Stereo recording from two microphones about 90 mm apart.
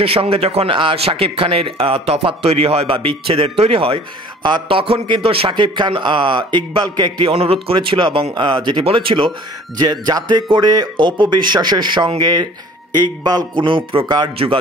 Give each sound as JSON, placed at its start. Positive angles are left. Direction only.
{"t": 0.0, "sound": "a man's voice", "side_deg": -90}
{"t": 4.4, "sound": "speech", "side_deg": -55}
{"t": 4.6, "sound": "a man's voice", "side_deg": -85}
{"t": 5.5, "sound": "a man's voice", "side_deg": -55}
{"t": 9.8, "sound": "a man's voice", "side_deg": -50}
{"t": 13.7, "sound": "a man's voice", "side_deg": -65}